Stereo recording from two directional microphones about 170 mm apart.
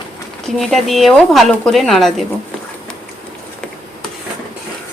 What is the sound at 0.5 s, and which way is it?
Speech, centre (ahead or behind).